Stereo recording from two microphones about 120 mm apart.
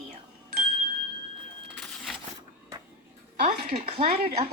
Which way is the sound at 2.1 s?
5° left (ahead or behind).